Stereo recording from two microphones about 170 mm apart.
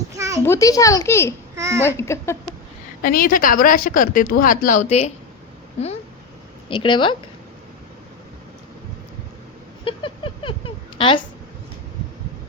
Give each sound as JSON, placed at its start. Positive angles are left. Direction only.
{"t": 0.1, "sound": "a sound", "side_deg": -20}
{"t": 0.4, "sound": "a child's voice", "side_deg": 15}
{"t": 1.5, "sound": "speech", "side_deg": -20}
{"t": 1.8, "sound": "a child's voice", "side_deg": 15}
{"t": 3.0, "sound": "a woman's voice", "side_deg": 60}
{"t": 6.7, "sound": "speech", "side_deg": 30}
{"t": 9.8, "sound": "a sound", "side_deg": 30}
{"t": 10.9, "sound": "a woman's voice", "side_deg": 30}